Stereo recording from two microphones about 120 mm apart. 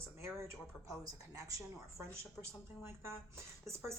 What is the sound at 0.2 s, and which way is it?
A woman's voice, 20° right (ahead or behind).